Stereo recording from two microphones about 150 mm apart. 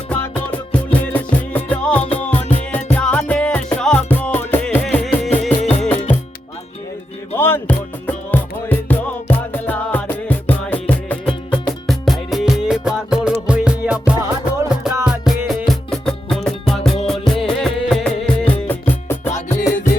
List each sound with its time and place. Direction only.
0.1 s music: 10° left (ahead or behind)
7.3 s music: 15° left (ahead or behind)